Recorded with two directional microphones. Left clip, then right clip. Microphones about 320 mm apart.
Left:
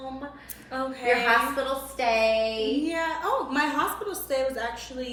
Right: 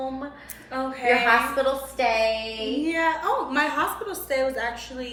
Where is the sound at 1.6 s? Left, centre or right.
Centre.